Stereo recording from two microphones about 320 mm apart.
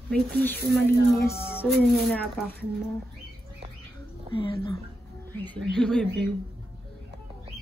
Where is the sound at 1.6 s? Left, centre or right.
Centre.